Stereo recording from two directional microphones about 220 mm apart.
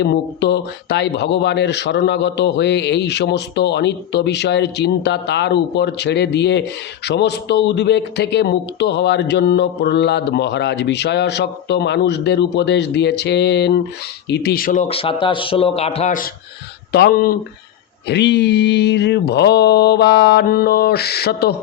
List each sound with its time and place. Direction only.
0.0 s a man's voice: 50° left (ahead or behind)